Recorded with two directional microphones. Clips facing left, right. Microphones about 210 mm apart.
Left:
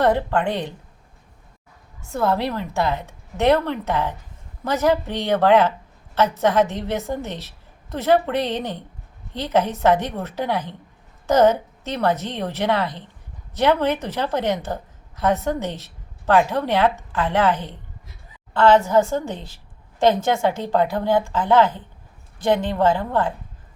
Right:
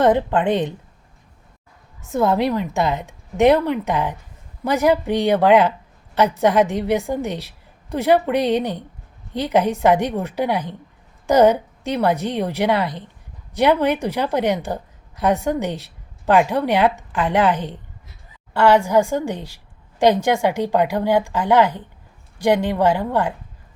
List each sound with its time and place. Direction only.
0.0 s a woman's voice: 20° right (ahead or behind)
2.0 s a woman's voice: 20° right (ahead or behind)